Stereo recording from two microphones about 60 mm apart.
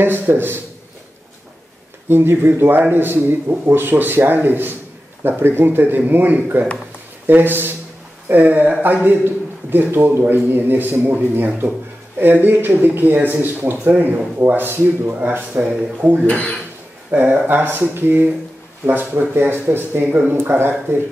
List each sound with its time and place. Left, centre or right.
0.0 s a man's voice: right
2.0 s a man's voice: right
16.3 s speech: left
17.1 s a man's voice: right